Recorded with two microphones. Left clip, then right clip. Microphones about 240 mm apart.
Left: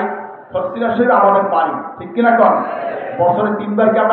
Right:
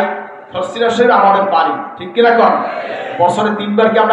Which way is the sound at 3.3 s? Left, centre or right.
Right.